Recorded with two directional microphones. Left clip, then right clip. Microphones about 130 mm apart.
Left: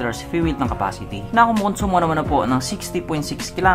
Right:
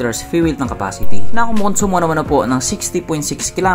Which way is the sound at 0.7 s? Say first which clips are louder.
Right 1 dB; 40° right (ahead or behind).